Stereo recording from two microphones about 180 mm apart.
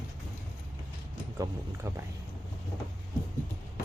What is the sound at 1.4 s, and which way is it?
Speech, 15° right (ahead or behind).